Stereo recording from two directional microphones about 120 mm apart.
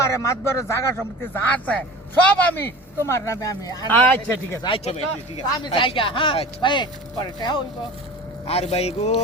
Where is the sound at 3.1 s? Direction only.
25° left (ahead or behind).